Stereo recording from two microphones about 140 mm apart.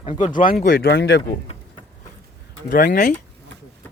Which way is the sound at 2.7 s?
75° left (ahead or behind).